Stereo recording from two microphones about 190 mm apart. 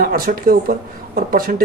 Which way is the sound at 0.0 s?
50° right (ahead or behind).